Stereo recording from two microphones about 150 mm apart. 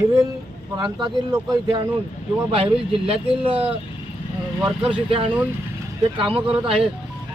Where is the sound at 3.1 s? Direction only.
40° right (ahead or behind).